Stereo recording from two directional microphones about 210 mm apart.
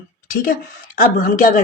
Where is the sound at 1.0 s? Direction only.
40° left (ahead or behind).